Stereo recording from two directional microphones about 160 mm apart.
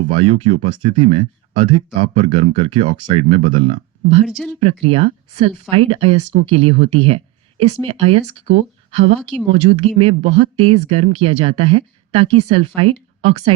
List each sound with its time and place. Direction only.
0.0 s speech: 35° right (ahead or behind)
4.3 s speech: centre (ahead or behind)
4.6 s speech: 35° right (ahead or behind)